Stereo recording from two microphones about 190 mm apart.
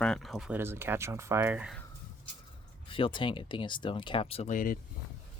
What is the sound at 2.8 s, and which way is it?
Speech, 25° left (ahead or behind).